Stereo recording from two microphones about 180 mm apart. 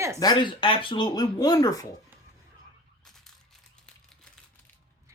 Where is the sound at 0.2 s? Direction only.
25° left (ahead or behind).